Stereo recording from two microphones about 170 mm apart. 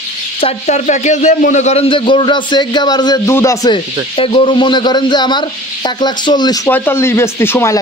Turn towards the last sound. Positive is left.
turn(degrees=15)  # may be behind; listen again after turning